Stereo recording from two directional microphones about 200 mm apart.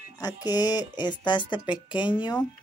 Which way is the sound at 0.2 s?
20° left (ahead or behind).